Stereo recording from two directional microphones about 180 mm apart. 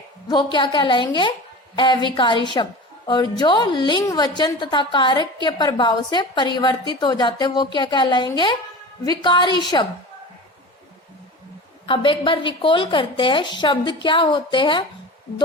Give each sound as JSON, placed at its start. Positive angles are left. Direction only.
{"t": 0.3, "sound": "a woman's voice", "side_deg": 25}
{"t": 11.9, "sound": "a woman's voice", "side_deg": 30}